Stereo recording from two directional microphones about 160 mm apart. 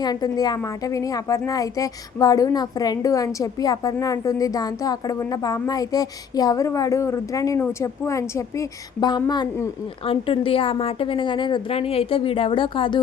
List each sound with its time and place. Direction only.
0.0 s a woman's voice: 25° left (ahead or behind)